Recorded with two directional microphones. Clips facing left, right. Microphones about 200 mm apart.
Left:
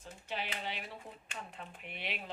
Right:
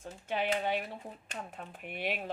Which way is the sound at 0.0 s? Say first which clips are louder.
Right 7 dB; 50° right (ahead or behind).